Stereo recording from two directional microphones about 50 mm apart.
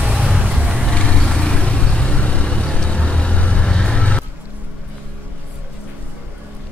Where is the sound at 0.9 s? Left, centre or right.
Centre.